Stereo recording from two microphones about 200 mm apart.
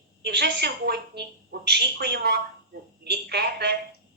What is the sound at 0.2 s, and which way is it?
A woman's voice, 55° right (ahead or behind).